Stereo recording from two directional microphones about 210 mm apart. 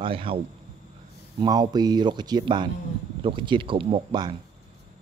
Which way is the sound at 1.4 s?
20° right (ahead or behind).